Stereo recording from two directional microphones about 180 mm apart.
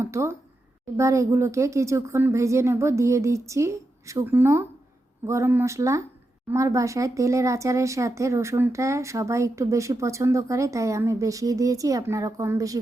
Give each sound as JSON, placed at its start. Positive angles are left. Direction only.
{"t": 0.0, "sound": "speech", "side_deg": -15}